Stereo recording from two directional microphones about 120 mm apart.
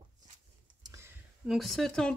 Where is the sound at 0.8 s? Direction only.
25° right (ahead or behind).